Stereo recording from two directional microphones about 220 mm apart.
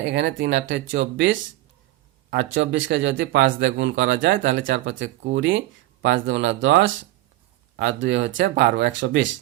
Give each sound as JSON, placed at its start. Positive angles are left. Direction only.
{"t": 0.0, "sound": "speech", "side_deg": -55}
{"t": 2.3, "sound": "speech", "side_deg": -55}
{"t": 7.8, "sound": "speech", "side_deg": -55}